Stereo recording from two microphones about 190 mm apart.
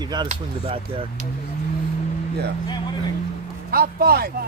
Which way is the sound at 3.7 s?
55° right (ahead or behind).